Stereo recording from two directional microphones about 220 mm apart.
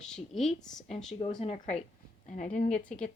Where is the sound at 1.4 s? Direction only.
30° left (ahead or behind).